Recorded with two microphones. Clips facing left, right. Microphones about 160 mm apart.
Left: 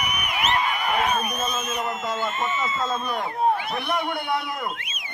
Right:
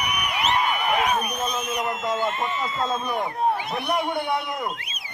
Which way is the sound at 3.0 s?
15° right (ahead or behind).